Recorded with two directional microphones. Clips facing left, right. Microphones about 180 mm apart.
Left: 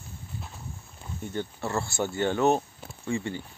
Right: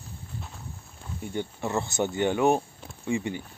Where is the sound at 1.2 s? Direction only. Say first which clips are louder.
Right 1 dB; 15° right (ahead or behind).